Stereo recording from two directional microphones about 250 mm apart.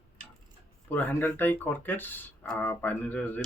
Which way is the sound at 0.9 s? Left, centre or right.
Centre.